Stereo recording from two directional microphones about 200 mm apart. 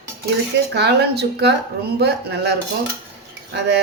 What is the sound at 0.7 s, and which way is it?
Speech, 55° right (ahead or behind).